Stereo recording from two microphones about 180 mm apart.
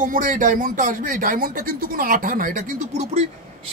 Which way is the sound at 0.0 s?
45° right (ahead or behind).